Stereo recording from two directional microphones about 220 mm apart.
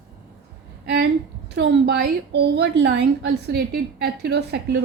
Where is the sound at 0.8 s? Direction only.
45° right (ahead or behind).